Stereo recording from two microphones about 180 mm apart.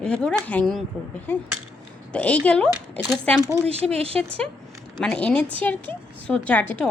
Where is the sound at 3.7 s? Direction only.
35° right (ahead or behind).